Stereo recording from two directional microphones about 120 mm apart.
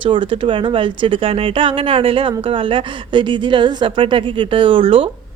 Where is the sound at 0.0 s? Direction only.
45° right (ahead or behind).